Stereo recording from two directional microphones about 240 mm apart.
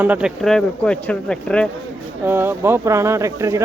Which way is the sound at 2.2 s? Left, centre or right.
Centre.